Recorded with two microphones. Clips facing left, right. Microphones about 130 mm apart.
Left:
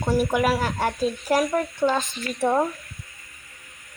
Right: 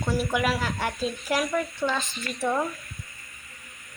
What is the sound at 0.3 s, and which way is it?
Speech, 40° left (ahead or behind).